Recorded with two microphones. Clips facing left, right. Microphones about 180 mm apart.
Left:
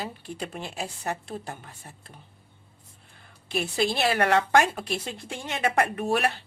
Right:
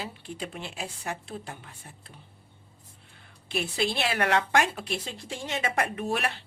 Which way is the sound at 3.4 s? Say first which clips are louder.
Left 3 dB; 45° left (ahead or behind).